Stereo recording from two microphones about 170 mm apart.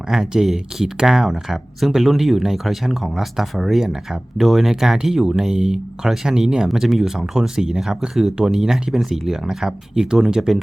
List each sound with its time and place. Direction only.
0.1 s speech: 5° right (ahead or behind)